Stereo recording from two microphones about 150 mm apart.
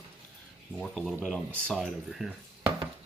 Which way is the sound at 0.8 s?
5° left (ahead or behind).